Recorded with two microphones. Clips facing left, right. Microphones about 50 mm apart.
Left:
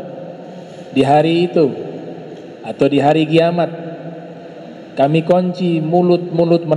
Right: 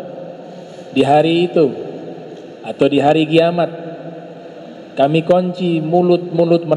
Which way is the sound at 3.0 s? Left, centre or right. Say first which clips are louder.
Even; centre.